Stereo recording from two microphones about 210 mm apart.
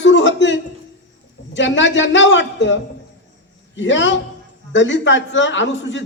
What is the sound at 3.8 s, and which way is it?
A man's voice, 60° left (ahead or behind).